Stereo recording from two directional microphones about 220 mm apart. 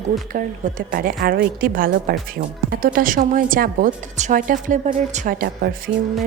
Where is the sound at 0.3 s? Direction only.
40° right (ahead or behind).